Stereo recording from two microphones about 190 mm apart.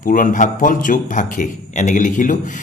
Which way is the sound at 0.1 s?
45° left (ahead or behind).